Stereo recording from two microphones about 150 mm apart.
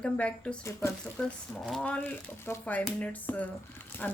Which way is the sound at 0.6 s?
20° left (ahead or behind).